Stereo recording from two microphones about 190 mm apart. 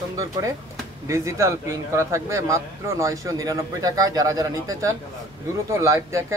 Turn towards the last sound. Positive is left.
turn(degrees=-15)  # may be behind; listen again after turning